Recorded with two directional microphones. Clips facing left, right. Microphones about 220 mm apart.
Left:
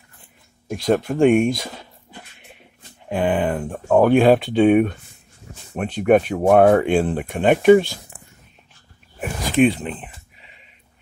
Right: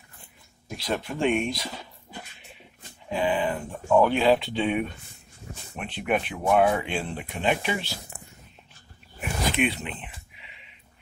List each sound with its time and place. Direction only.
0.7 s speech: 50° left (ahead or behind)
3.1 s speech: 55° left (ahead or behind)
9.5 s a sound: 45° left (ahead or behind)